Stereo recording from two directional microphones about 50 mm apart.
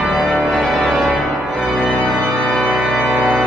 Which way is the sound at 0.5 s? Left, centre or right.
Centre.